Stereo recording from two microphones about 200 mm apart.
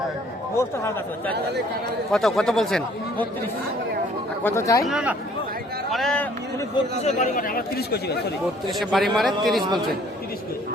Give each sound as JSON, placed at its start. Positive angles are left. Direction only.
{"t": 0.5, "sound": "speech", "side_deg": 15}
{"t": 2.1, "sound": "speech", "side_deg": 0}
{"t": 4.8, "sound": "speech", "side_deg": -5}
{"t": 7.0, "sound": "speech", "side_deg": 40}
{"t": 8.8, "sound": "speech", "side_deg": 0}